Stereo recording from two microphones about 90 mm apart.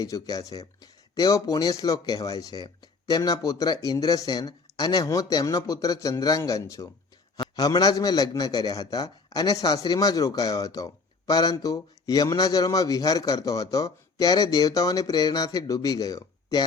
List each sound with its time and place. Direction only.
0.0 s speech: 40° left (ahead or behind)